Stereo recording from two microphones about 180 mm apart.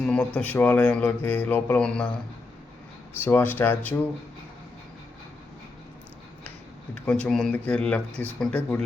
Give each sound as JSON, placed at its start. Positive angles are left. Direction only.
{"t": 0.0, "sound": "a sound", "side_deg": 5}
{"t": 0.3, "sound": "speech", "side_deg": 10}
{"t": 3.2, "sound": "speech", "side_deg": 10}
{"t": 6.9, "sound": "speech", "side_deg": 5}